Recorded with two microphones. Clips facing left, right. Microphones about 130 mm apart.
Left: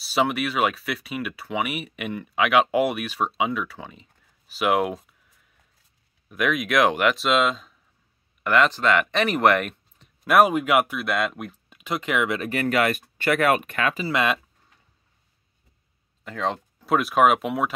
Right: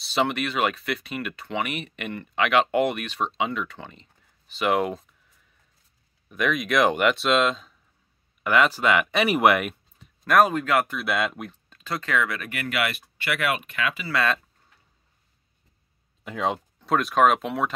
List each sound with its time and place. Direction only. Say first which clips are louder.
0.0 s speech: left 2 dB; 5° left (ahead or behind)
6.2 s speech: left 1 dB; 5° left (ahead or behind)
10.2 s speech: left 2 dB; 10° left (ahead or behind)
11.0 s speech: left 1 dB; centre (ahead or behind)
11.7 s speech: left 1 dB; 15° left (ahead or behind); by 14.0 s 45° left (ahead or behind)
14.0 s speech: even; 20° left (ahead or behind)
16.3 s speech: right 1 dB; 10° right (ahead or behind)
16.7 s speech: left 3 dB; 5° left (ahead or behind)